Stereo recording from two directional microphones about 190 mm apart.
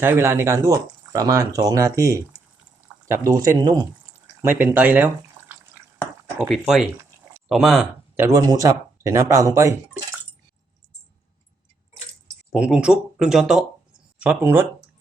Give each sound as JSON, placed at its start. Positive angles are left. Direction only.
{"t": 0.0, "sound": "speech", "side_deg": -15}
{"t": 12.5, "sound": "speech", "side_deg": -5}